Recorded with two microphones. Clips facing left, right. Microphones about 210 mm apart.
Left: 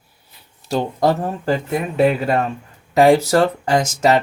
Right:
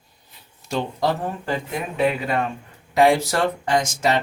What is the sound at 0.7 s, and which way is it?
Speech, 45° left (ahead or behind).